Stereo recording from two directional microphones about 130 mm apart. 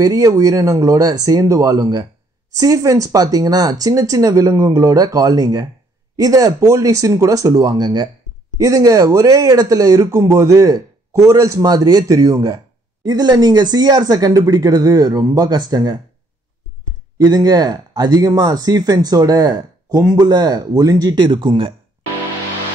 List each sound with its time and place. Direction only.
0.0 s speech: 25° right (ahead or behind)
17.2 s speech: 30° right (ahead or behind)